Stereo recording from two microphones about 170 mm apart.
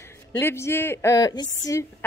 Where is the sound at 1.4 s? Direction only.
90° left.